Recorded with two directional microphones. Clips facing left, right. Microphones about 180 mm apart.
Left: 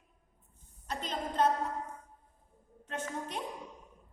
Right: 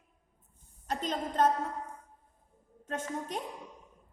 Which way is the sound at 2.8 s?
45° right (ahead or behind).